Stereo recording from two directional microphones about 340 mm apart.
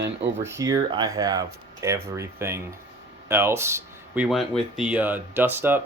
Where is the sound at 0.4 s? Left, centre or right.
Centre.